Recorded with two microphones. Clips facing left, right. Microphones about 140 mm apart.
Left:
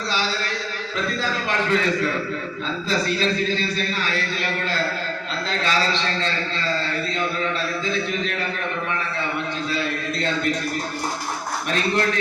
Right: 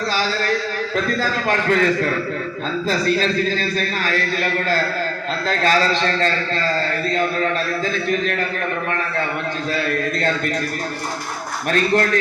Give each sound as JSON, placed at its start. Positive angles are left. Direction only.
{"t": 0.9, "sound": "a man's voice", "side_deg": -45}
{"t": 5.5, "sound": "a man's voice", "side_deg": -45}
{"t": 9.7, "sound": "a man's voice", "side_deg": -50}
{"t": 11.7, "sound": "a man's voice", "side_deg": -45}